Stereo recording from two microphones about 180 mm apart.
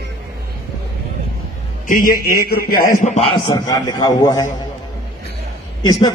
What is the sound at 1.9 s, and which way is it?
A man's voice, 50° left (ahead or behind).